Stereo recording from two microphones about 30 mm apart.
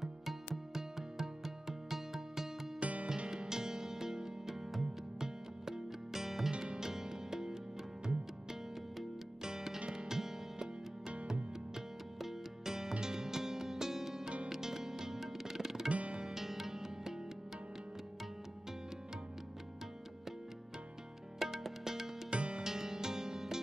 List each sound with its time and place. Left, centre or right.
0.0 s music: centre
2.8 s music: right
3.3 s music: centre
9.4 s music: centre
15.9 s music: right
16.3 s music: centre
21.4 s music: centre
22.3 s music: right
22.6 s music: centre